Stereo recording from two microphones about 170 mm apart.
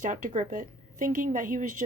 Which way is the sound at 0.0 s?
50° right (ahead or behind).